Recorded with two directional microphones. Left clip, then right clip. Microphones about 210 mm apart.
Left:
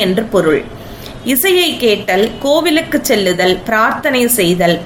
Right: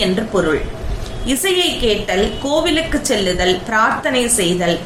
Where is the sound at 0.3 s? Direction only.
40° left (ahead or behind).